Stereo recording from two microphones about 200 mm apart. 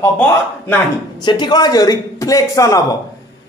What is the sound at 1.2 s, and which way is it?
Speech, 20° left (ahead or behind).